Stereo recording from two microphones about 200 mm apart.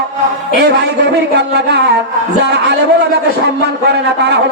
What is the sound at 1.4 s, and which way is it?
A man's voice, 60° right (ahead or behind).